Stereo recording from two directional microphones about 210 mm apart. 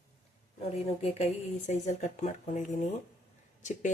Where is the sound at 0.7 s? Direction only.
30° left (ahead or behind).